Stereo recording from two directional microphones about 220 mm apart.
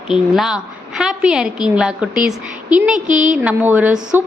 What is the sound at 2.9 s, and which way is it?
Speech, 35° right (ahead or behind).